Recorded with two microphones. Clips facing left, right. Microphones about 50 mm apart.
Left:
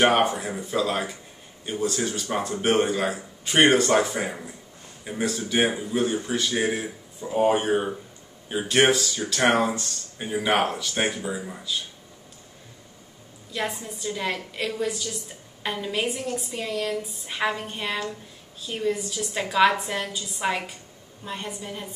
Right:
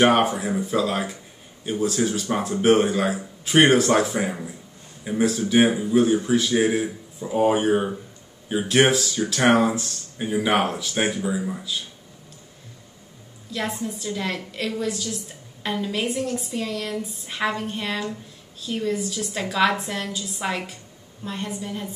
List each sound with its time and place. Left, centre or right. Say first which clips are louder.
0.0 s speech: right 2 dB; centre
13.5 s a woman's voice: right 2 dB; centre